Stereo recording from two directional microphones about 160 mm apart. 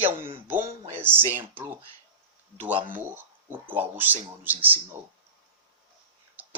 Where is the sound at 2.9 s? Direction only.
10° right (ahead or behind).